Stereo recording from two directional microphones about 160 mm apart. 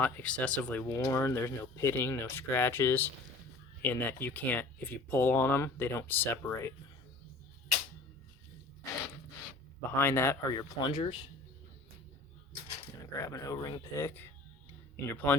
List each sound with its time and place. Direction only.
0.0 s speech: 10° left (ahead or behind)
10.0 s speech: 15° left (ahead or behind); by 11.2 s 30° left (ahead or behind)
13.1 s speech: 20° left (ahead or behind)